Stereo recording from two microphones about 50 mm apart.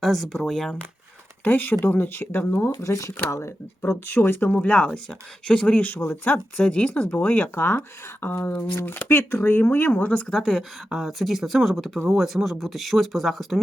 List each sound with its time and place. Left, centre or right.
0.0 s speech: centre
1.5 s speech: left
2.8 s speech: left
3.2 s speech: left
4.1 s speech: left
4.4 s a woman's voice: left
5.7 s speech: left
6.6 s a woman's voice: left
7.1 s a woman's voice: left
7.5 s speech: left
9.5 s speech: left
10.3 s speech: centre
10.9 s speech: centre